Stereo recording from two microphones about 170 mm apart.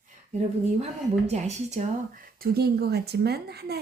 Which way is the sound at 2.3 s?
65° right (ahead or behind).